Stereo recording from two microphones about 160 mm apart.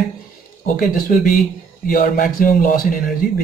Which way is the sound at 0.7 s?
60° left (ahead or behind).